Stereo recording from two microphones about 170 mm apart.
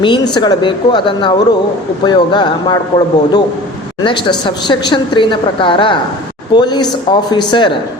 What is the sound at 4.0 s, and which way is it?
A woman's voice, 30° left (ahead or behind).